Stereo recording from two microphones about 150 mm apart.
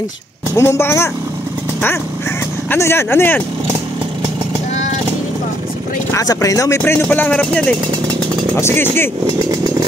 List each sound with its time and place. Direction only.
0.6 s speech: 15° left (ahead or behind)
2.7 s speech: 15° left (ahead or behind)
6.1 s speech: 20° left (ahead or behind)